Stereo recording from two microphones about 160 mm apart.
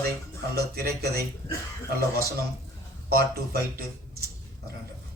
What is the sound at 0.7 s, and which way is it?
Speech, 80° right.